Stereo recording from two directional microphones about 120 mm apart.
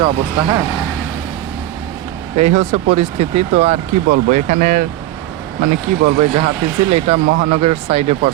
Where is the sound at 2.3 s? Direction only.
80° right.